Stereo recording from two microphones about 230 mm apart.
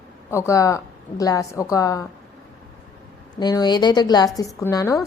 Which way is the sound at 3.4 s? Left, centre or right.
Centre.